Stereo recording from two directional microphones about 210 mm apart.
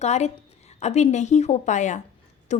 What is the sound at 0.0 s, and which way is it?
A woman's voice, 30° left (ahead or behind).